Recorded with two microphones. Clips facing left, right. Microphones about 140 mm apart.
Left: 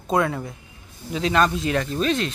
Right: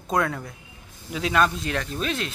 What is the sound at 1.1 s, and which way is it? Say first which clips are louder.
Speech: left 2 dB; 5° right (ahead or behind).